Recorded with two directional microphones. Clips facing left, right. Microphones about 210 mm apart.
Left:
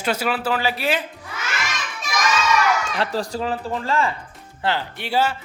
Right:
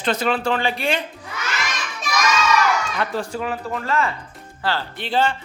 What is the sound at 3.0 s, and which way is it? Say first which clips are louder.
Speech: left 1 dB; 35° left (ahead or behind).